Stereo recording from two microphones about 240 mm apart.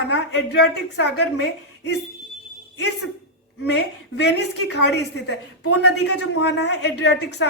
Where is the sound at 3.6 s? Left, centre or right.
Left.